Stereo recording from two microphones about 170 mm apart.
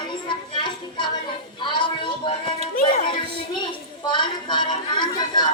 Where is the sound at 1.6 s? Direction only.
30° left (ahead or behind).